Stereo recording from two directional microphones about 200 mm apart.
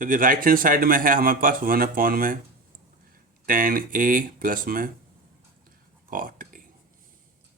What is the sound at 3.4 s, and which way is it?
Speech, 45° right (ahead or behind).